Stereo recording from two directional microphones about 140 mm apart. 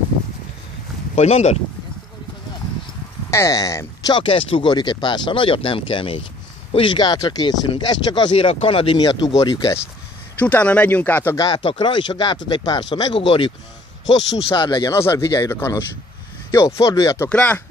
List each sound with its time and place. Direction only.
1.1 s speech: 50° left (ahead or behind)
3.3 s speech: 20° left (ahead or behind)
10.4 s speech: 10° left (ahead or behind)
11.3 s speech: 30° left (ahead or behind)
14.5 s speech: 35° left (ahead or behind)
14.9 s speech: 20° left (ahead or behind)
17.3 s speech: 10° left (ahead or behind)